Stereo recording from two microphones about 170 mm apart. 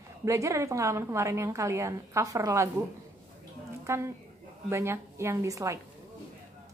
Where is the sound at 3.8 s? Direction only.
15° right (ahead or behind).